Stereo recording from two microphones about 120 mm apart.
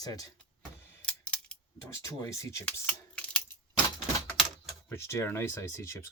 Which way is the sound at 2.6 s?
10° left (ahead or behind).